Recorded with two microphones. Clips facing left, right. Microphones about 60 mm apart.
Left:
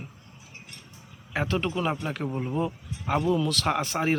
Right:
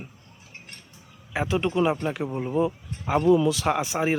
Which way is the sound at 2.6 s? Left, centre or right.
Centre.